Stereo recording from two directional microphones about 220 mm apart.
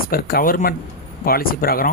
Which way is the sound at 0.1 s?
45° left (ahead or behind).